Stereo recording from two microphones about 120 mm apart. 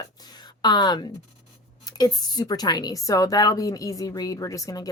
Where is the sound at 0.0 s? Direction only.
35° left (ahead or behind).